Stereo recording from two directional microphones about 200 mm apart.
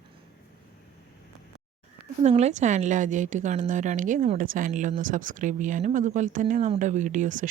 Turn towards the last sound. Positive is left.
turn(degrees=-40)  # may be behind; listen again after turning